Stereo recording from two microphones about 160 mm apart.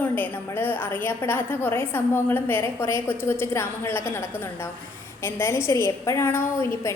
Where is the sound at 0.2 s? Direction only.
10° left (ahead or behind).